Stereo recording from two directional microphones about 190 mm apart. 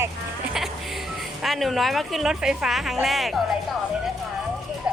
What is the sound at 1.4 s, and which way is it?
Speech, centre (ahead or behind).